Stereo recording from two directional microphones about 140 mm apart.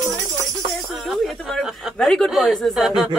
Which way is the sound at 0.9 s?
Centre (ahead or behind).